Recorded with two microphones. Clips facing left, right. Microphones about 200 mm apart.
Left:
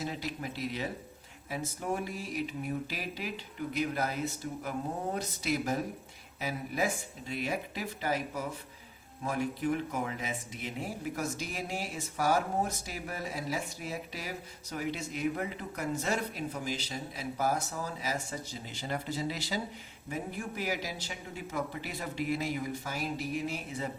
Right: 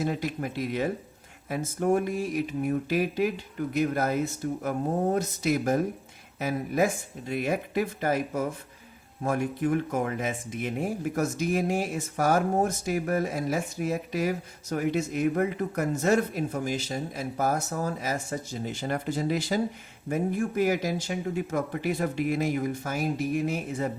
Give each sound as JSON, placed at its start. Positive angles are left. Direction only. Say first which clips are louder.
{"t": 0.0, "sound": "speech", "louder": "right 7 dB", "side_deg": -50}